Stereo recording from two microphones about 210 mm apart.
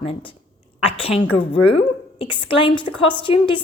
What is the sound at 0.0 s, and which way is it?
A woman's voice, 25° left (ahead or behind).